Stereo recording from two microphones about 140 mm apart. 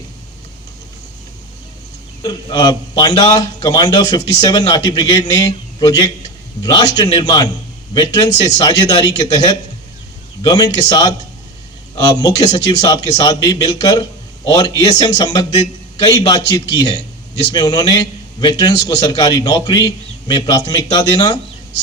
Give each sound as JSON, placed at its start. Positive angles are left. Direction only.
{"t": 2.2, "sound": "a man's voice", "side_deg": 30}